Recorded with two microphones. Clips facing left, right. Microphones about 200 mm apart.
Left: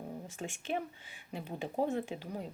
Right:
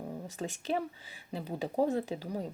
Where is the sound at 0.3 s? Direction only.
40° right (ahead or behind).